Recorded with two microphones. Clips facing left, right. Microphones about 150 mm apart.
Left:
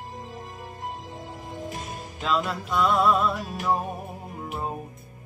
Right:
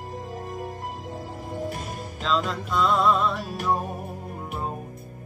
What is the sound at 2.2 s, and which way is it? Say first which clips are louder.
Music: even; 5° left (ahead or behind).